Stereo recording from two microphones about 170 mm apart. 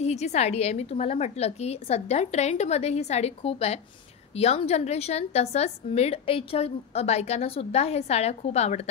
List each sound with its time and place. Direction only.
0.0 s a woman's voice: 40° left (ahead or behind)